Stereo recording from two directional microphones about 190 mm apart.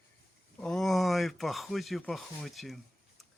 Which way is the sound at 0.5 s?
5° left (ahead or behind).